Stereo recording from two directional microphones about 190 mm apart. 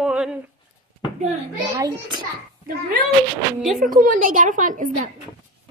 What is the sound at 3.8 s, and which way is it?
A woman's voice, 45° right (ahead or behind).